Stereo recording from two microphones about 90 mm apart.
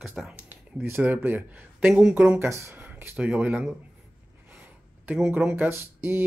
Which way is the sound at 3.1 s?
15° right (ahead or behind).